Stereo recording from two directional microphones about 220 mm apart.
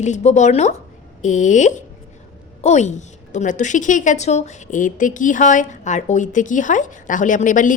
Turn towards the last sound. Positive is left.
turn(degrees=35)  # may be behind; listen again after turning